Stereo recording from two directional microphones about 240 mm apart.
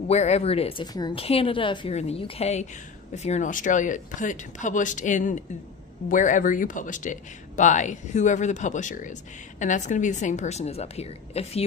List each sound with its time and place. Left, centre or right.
0.1 s speech: left